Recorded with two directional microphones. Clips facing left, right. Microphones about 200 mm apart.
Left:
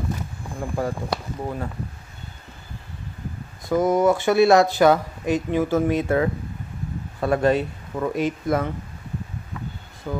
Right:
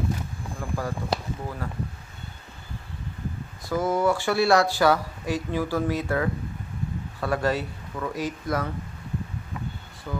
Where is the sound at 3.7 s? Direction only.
20° left (ahead or behind).